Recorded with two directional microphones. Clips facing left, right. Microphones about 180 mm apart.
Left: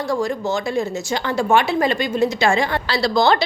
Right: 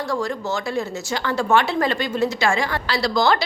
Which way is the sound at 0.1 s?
10° left (ahead or behind).